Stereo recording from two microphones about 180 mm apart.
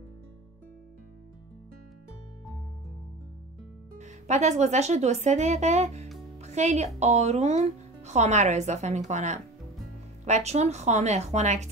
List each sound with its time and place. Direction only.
4.0 s speech: 40° right (ahead or behind)
6.3 s music: 40° right (ahead or behind)
7.0 s speech: 40° right (ahead or behind)